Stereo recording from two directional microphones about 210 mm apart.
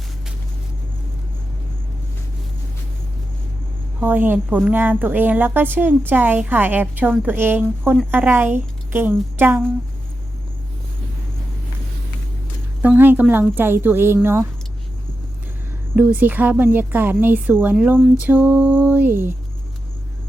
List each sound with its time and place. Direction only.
4.0 s a woman's voice: 10° right (ahead or behind)
12.8 s a woman's voice: 10° right (ahead or behind)
16.0 s a woman's voice: 10° right (ahead or behind)